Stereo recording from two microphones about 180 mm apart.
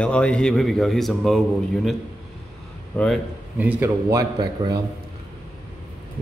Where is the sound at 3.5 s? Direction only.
10° right (ahead or behind).